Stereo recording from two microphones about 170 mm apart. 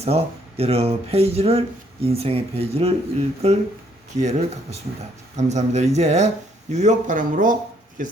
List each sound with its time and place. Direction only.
0.0 s speech: 35° right (ahead or behind)